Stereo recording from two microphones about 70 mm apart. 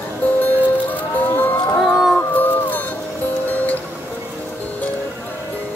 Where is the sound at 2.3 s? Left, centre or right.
Left.